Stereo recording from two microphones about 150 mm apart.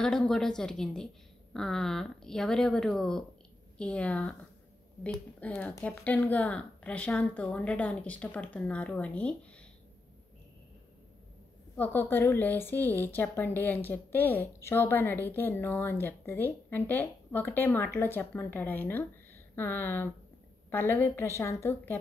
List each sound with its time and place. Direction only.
0.0 s speech: centre (ahead or behind)
11.7 s speech: 15° left (ahead or behind)